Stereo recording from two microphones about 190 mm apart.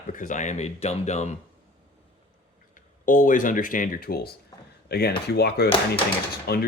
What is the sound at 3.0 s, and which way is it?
Speech, 45° left (ahead or behind).